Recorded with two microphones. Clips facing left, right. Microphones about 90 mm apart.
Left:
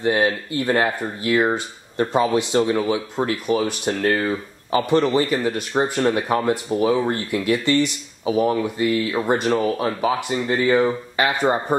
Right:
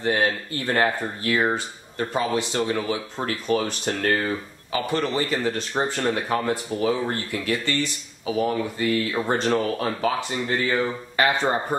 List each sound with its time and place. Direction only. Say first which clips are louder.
0.0 s speech: left 3 dB; 20° left (ahead or behind)
4.7 s speech: left 6 dB; 20° left (ahead or behind)